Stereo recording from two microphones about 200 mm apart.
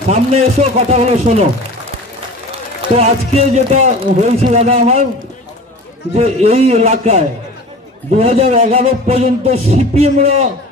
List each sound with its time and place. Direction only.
0.1 s a man's voice: 30° right (ahead or behind)
2.9 s a man's voice: 30° right (ahead or behind)
6.1 s a man's voice: 30° right (ahead or behind)